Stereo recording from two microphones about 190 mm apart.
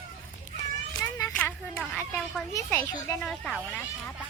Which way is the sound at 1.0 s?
15° left (ahead or behind).